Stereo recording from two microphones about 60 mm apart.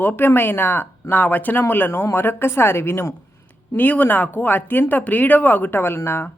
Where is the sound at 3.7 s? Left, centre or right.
Left.